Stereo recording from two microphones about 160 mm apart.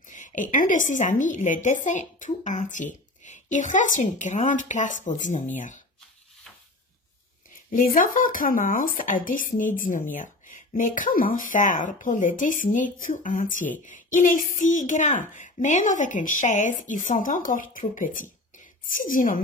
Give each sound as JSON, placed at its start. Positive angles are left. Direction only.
{"t": 0.1, "sound": "a woman's voice", "side_deg": 50}
{"t": 7.7, "sound": "speech", "side_deg": 55}